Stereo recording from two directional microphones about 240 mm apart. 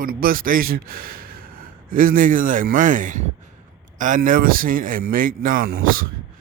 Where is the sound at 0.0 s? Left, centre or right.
Right.